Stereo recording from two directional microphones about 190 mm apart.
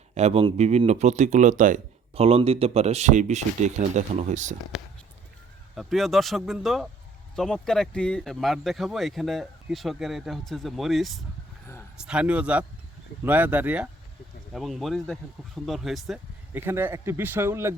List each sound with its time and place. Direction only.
0.1 s speech: 35° right (ahead or behind)
4.7 s speech: 5° right (ahead or behind)